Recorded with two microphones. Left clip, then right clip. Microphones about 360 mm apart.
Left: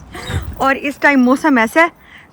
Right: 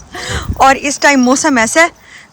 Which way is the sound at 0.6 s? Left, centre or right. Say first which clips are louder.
Right 5 dB; centre.